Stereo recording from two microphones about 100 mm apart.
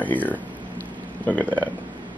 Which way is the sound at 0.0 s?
15° left (ahead or behind).